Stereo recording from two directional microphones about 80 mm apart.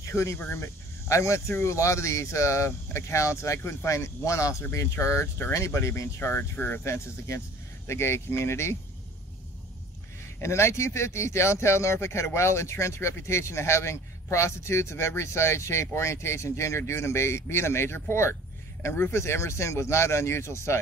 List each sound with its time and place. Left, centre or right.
0.0 s speech: left
6.8 s speech: left
10.4 s speech: left